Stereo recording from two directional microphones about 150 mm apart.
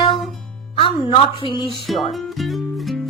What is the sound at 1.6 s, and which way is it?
Speech, centre (ahead or behind).